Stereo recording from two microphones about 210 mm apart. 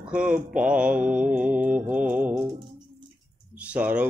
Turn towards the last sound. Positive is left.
turn(degrees=-5)  # may be behind; listen again after turning